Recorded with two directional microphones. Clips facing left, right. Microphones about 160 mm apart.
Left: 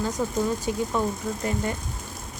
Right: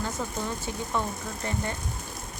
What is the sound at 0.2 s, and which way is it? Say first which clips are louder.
Speech: left 6 dB; 10° left (ahead or behind).